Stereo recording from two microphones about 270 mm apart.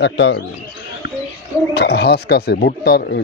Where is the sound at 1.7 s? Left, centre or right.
Left.